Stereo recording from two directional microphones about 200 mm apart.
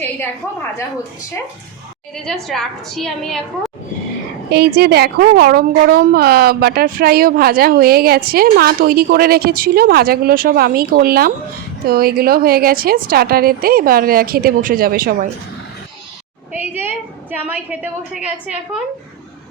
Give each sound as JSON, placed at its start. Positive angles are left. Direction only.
{"t": 2.1, "sound": "a woman's voice", "side_deg": 0}
{"t": 4.4, "sound": "a woman's voice", "side_deg": -55}
{"t": 16.5, "sound": "a sound", "side_deg": -10}
{"t": 17.3, "sound": "a woman's voice", "side_deg": -10}